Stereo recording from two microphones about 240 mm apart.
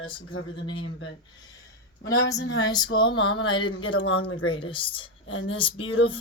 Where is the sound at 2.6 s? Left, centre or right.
Centre.